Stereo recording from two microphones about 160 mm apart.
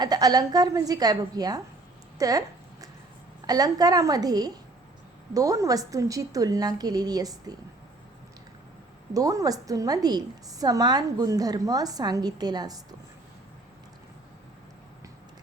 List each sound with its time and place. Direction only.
0.0 s a woman's voice: 25° right (ahead or behind)
3.4 s a woman's voice: 25° right (ahead or behind)
9.1 s a woman's voice: 20° right (ahead or behind)